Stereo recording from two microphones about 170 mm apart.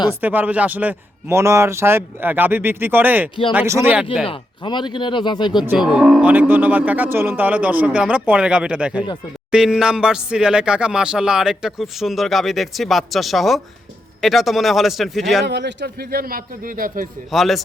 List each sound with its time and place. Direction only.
0.2 s a man's voice: 10° right (ahead or behind)
4.3 s speech: 30° left (ahead or behind)
5.6 s a man's voice: 5° right (ahead or behind)
15.4 s a man's voice: 90° right; by 17.1 s 55° right (ahead or behind)
17.3 s speech: centre (ahead or behind)